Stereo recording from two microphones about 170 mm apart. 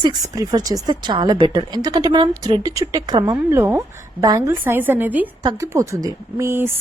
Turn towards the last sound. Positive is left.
turn(degrees=-15)  # may be behind; listen again after turning